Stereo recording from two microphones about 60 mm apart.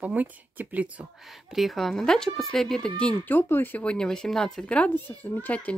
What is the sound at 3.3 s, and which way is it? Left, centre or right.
Speech, left.